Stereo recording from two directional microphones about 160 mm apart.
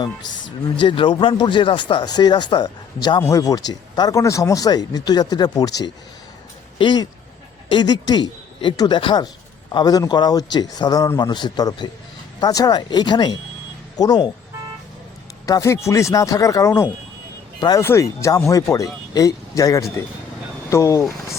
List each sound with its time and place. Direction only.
0.8 s speech: 30° left (ahead or behind)
15.4 s speech: 20° left (ahead or behind)